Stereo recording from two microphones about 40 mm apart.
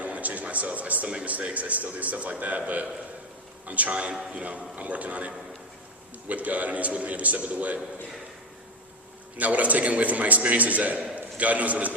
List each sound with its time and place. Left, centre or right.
0.0 s a sound: right
1.2 s a man's voice: right
4.2 s a man's voice: right
4.4 s a man's voice: right
9.4 s a man's voice: right